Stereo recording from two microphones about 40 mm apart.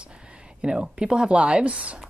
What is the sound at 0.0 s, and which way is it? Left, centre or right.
Speech, right.